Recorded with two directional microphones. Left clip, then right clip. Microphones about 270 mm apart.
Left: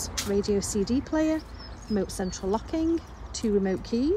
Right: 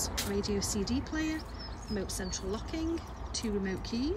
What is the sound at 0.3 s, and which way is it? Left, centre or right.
A woman's voice, centre.